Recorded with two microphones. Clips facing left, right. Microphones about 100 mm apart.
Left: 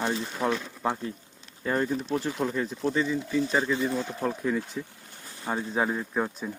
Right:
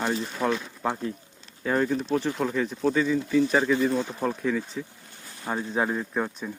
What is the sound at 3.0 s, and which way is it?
Speech, 15° left (ahead or behind).